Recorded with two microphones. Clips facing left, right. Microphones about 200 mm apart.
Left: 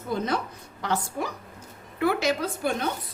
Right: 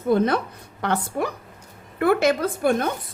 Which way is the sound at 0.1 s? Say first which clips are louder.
Right 6 dB; 60° right (ahead or behind).